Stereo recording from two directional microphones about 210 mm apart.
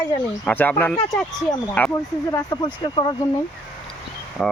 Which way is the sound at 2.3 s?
20° left (ahead or behind).